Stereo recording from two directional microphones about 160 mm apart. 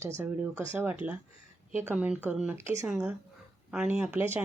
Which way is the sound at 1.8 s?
10° right (ahead or behind).